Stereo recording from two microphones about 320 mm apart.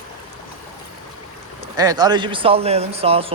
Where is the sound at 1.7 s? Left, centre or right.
Centre.